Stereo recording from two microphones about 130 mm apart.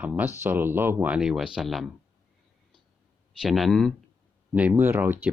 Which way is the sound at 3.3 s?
Centre (ahead or behind).